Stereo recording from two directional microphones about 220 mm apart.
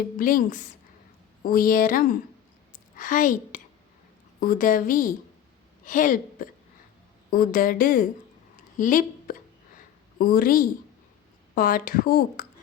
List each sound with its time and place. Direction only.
0.2 s a woman's voice: 40° left (ahead or behind)